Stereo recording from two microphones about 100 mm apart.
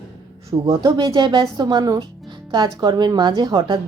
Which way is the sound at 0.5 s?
45° right (ahead or behind).